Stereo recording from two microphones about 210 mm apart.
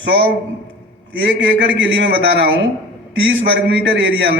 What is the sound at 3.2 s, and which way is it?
Speech, 60° right (ahead or behind).